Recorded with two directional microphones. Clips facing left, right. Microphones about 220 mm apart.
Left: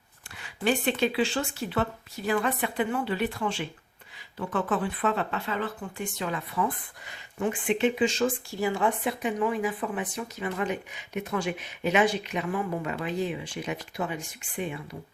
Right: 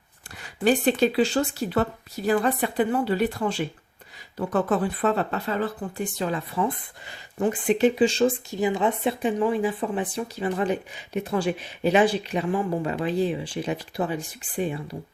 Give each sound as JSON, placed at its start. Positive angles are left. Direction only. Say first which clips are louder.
{"t": 0.3, "sound": "speech", "louder": "right 5 dB", "side_deg": -40}